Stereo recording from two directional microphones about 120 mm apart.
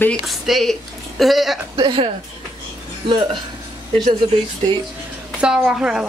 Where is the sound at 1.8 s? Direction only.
40° right (ahead or behind).